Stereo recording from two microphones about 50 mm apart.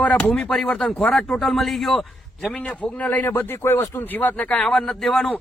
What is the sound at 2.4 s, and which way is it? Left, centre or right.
A man's voice, left.